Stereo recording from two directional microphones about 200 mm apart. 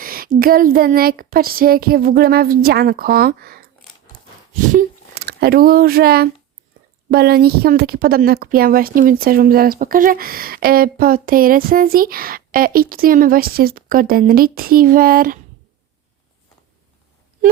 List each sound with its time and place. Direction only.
0.0 s speech: 45° right (ahead or behind)
4.7 s speech: 45° right (ahead or behind)